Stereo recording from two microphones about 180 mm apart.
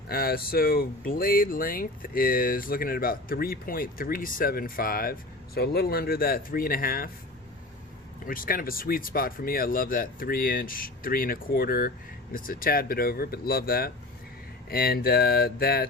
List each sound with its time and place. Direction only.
0.1 s speech: 55° left (ahead or behind)
8.2 s speech: 50° left (ahead or behind)